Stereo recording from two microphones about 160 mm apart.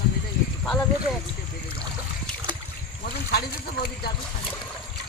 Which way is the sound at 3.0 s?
70° left (ahead or behind).